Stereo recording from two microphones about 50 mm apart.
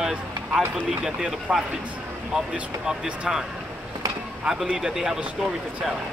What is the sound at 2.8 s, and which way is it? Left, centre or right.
Speech, centre.